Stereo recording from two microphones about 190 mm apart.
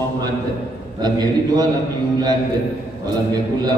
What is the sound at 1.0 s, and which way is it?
Speech, 20° right (ahead or behind).